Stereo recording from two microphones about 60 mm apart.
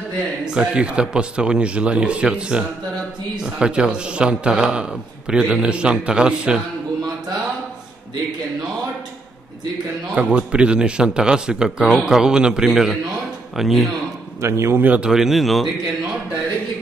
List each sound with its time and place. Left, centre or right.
0.6 s a man's voice: centre
10.1 s a man's voice: centre
14.4 s a man's voice: right
15.0 s speech: centre